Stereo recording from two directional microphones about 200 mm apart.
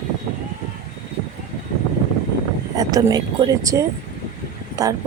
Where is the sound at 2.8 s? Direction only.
15° right (ahead or behind).